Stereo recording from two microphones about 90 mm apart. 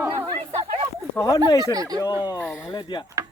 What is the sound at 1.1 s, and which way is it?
Speech, 30° left (ahead or behind).